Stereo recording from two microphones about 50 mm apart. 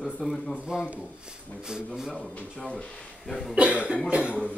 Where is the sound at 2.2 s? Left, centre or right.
Left.